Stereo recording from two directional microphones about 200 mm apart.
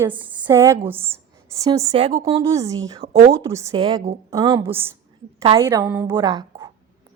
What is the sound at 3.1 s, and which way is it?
Speech, 50° right (ahead or behind).